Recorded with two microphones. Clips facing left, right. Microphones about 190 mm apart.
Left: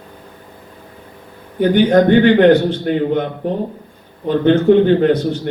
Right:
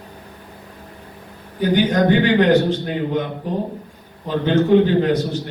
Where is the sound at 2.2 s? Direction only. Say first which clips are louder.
Left 5 dB; 55° left (ahead or behind).